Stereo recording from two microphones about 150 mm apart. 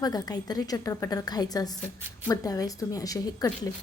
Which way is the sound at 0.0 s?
25° left (ahead or behind).